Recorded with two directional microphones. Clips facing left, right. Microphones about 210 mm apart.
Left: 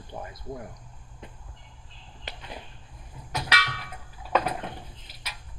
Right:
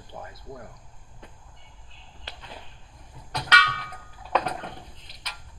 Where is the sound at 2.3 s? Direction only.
20° left (ahead or behind).